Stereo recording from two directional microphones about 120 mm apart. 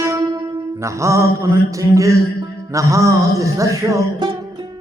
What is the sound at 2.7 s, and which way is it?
Music, 25° right (ahead or behind).